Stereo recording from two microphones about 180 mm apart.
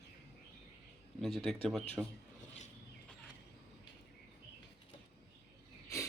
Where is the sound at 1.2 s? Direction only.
Centre (ahead or behind).